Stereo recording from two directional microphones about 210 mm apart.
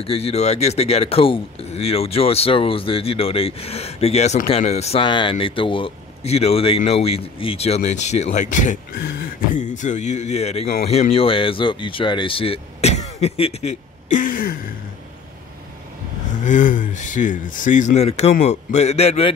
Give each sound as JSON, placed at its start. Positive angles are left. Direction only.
{"t": 0.0, "sound": "speech", "side_deg": 30}
{"t": 16.4, "sound": "speech", "side_deg": 40}